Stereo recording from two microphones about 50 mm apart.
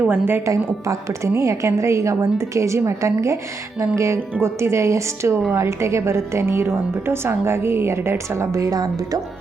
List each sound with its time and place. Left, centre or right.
0.1 s speech: right
0.4 s a woman's voice: right